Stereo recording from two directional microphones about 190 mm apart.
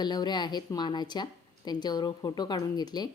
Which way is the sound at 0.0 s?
20° left (ahead or behind).